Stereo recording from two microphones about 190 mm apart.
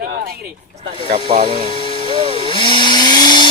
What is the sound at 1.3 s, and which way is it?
Speech, 30° right (ahead or behind).